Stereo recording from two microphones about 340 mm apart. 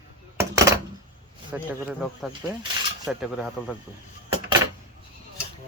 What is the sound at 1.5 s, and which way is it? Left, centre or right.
Speech, centre.